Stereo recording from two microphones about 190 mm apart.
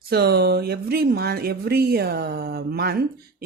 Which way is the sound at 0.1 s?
55° right (ahead or behind).